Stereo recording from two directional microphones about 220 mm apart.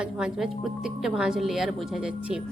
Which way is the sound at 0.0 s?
5° right (ahead or behind).